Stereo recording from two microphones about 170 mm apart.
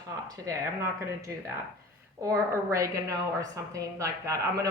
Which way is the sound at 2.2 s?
20° right (ahead or behind).